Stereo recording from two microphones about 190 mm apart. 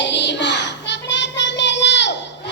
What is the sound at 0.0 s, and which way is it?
Child singing, 65° left (ahead or behind).